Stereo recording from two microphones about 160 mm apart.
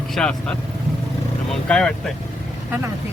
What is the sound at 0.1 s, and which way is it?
Speech, 5° left (ahead or behind).